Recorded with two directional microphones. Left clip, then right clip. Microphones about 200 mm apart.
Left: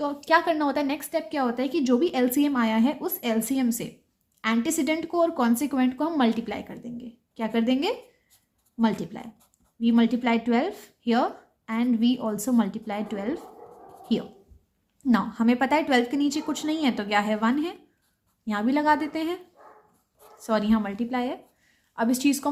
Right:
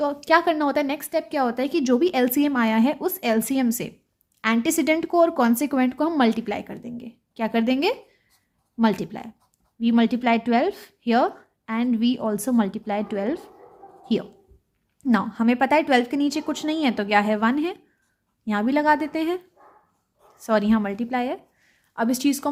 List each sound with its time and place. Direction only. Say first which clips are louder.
0.0 s a woman's voice: right 3 dB; 35° right (ahead or behind)
20.4 s a woman's voice: right 4 dB; 30° right (ahead or behind)